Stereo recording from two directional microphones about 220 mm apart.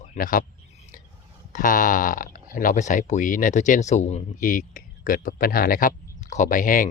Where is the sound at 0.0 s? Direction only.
35° left (ahead or behind).